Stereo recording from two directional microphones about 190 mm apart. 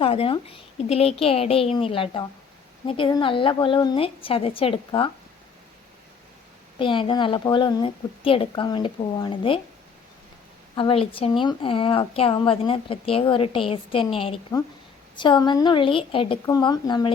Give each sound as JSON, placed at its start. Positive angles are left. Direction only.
{"t": 0.0, "sound": "a woman's voice", "side_deg": 30}
{"t": 6.7, "sound": "a woman's voice", "side_deg": 25}
{"t": 10.8, "sound": "a woman's voice", "side_deg": 30}